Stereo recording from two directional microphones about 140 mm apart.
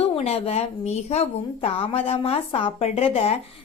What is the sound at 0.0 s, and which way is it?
A woman's voice, 45° left (ahead or behind).